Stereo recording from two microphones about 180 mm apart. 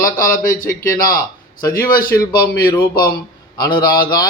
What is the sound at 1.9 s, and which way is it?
A man's voice, 55° left (ahead or behind).